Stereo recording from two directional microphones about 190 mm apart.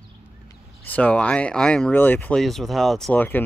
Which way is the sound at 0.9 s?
5° left (ahead or behind).